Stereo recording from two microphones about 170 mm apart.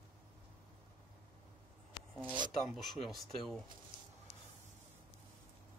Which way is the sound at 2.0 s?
25° left (ahead or behind).